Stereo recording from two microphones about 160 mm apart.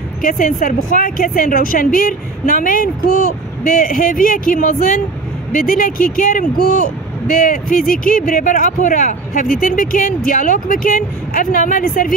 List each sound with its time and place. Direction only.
0.2 s speech: 60° left (ahead or behind)